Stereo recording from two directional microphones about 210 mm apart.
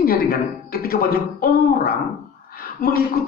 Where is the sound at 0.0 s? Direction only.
45° left (ahead or behind).